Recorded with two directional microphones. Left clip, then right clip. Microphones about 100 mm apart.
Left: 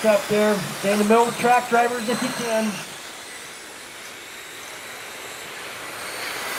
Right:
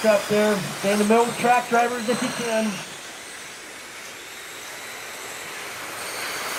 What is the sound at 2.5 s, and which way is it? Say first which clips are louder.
Speech: left 1 dB; 35° left (ahead or behind).